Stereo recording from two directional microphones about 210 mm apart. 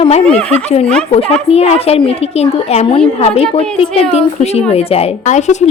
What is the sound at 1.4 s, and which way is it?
A woman's voice, 30° left (ahead or behind).